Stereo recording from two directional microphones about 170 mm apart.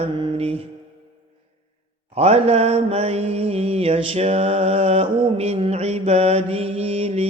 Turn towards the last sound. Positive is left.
turn(degrees=-35)  # may be behind; listen again after turning